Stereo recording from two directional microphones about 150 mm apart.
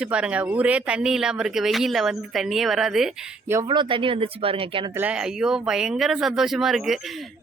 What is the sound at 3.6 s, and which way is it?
Speech, 30° right (ahead or behind).